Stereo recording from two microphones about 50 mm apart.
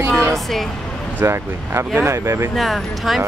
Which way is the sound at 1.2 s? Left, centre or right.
Right.